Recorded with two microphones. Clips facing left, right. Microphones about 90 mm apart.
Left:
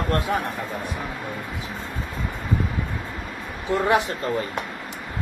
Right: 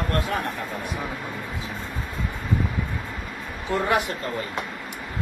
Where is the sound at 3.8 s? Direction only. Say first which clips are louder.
Left 3 dB; 20° left (ahead or behind).